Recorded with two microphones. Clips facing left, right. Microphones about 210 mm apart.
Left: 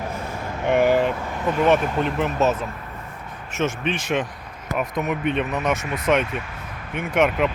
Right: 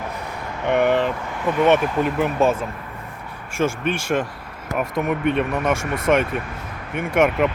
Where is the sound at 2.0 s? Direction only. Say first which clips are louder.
Right 2 dB; 5° right (ahead or behind).